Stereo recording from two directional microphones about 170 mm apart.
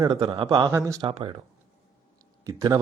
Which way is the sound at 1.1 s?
30° right (ahead or behind).